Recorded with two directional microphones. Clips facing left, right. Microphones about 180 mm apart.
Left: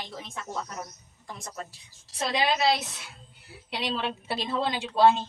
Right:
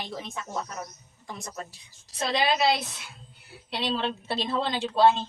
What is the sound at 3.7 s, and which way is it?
A woman's voice, 10° left (ahead or behind).